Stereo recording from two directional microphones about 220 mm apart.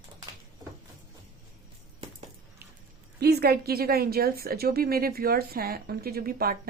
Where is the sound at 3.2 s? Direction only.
45° right (ahead or behind).